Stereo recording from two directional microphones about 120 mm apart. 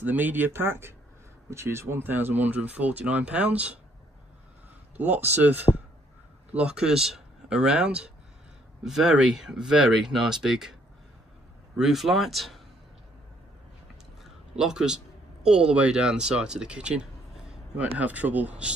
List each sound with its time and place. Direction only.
0.0 s speech: 15° right (ahead or behind)
4.9 s speech: 15° right (ahead or behind)
14.2 s a sound: 5° right (ahead or behind)
15.4 s speech: 5° right (ahead or behind)